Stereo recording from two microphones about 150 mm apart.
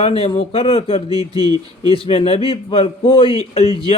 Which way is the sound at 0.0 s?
40° left (ahead or behind).